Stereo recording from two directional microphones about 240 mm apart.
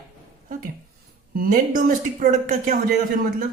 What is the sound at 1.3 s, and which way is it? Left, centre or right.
A man's voice, right.